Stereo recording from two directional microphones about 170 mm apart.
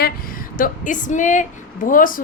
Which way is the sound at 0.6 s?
50° left (ahead or behind).